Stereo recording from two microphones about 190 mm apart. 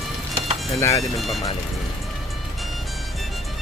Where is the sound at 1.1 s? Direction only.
Centre (ahead or behind).